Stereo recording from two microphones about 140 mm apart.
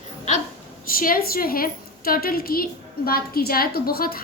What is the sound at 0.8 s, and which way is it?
A woman's voice, 90° left.